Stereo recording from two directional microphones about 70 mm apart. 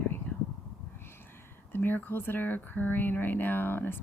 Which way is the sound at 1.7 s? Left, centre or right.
Left.